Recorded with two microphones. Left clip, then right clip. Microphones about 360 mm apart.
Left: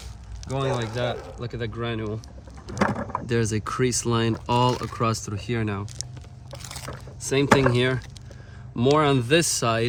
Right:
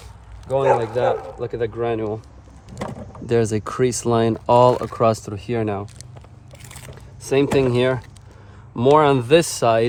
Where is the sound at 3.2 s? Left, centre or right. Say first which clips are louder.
Right 9 dB; centre.